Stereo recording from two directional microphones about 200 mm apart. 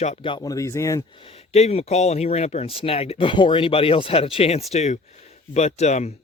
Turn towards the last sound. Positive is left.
turn(degrees=35)  # may be behind; listen again after turning